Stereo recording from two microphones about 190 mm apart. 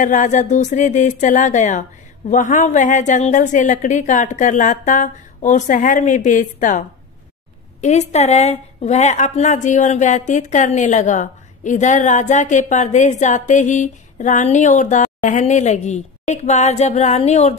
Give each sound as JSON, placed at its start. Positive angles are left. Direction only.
{"t": 0.0, "sound": "a woman's voice", "side_deg": 40}
{"t": 7.8, "sound": "a woman's voice", "side_deg": 35}